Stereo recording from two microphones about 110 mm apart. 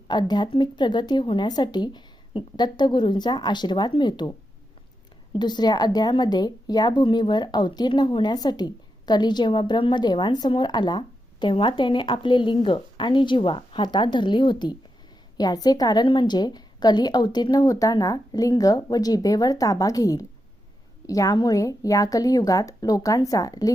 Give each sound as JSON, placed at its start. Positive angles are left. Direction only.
{"t": 0.1, "sound": "speech", "side_deg": 40}
{"t": 5.4, "sound": "speech", "side_deg": 40}